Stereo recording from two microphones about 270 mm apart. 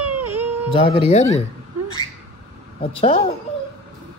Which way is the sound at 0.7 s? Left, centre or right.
Left.